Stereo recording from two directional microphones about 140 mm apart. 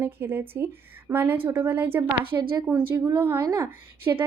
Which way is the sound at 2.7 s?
25° right (ahead or behind).